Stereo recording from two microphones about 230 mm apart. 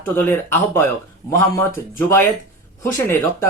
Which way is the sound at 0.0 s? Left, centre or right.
Centre.